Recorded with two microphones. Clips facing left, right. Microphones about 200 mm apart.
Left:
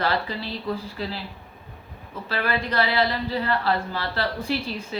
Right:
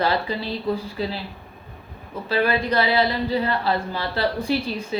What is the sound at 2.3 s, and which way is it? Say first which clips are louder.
Speech: right 5 dB; 15° right (ahead or behind).